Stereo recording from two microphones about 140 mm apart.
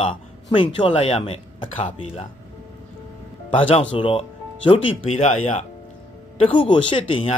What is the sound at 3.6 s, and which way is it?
Speech, 40° left (ahead or behind).